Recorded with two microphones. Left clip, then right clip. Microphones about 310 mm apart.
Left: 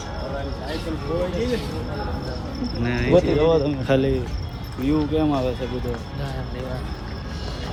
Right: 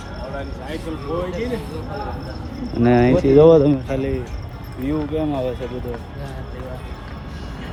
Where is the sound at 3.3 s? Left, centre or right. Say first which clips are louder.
Right 8 dB; right.